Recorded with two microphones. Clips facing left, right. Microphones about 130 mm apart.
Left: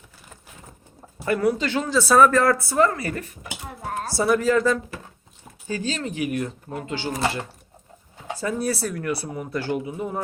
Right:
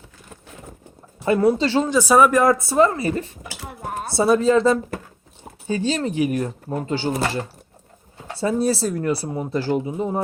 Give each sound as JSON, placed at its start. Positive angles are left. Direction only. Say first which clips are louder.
{"t": 1.2, "sound": "speech", "louder": "right 4 dB", "side_deg": -25}
{"t": 1.9, "sound": "speech", "louder": "even", "side_deg": -15}
{"t": 3.7, "sound": "dishes", "louder": "right 1 dB", "side_deg": -5}
{"t": 4.1, "sound": "speech", "louder": "right 4 dB", "side_deg": -25}
{"t": 8.4, "sound": "speech", "louder": "right 5 dB", "side_deg": -25}